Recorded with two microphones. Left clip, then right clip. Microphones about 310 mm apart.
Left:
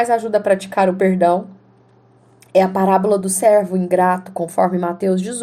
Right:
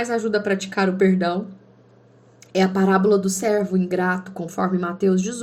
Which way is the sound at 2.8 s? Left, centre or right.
Left.